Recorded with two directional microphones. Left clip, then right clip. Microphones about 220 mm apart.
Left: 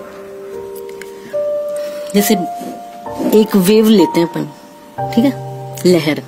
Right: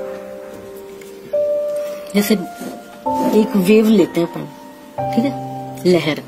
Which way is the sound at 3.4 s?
40° left (ahead or behind).